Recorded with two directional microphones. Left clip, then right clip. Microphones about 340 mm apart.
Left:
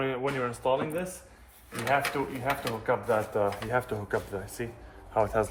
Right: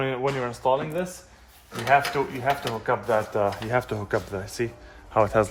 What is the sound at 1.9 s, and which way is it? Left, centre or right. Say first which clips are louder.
Speech: right 7 dB; right.